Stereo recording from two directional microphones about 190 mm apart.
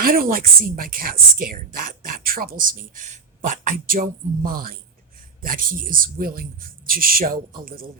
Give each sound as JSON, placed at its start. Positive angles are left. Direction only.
{"t": 0.0, "sound": "a woman's voice", "side_deg": -50}